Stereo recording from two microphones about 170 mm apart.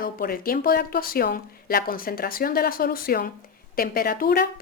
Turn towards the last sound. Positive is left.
turn(degrees=60)  # may be behind; listen again after turning